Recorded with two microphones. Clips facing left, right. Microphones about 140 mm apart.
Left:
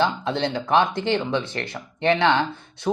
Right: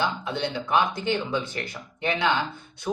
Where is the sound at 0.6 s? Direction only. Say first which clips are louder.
Left 3 dB; 30° left (ahead or behind).